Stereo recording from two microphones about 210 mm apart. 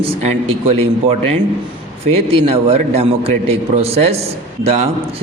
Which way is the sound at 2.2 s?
30° right (ahead or behind).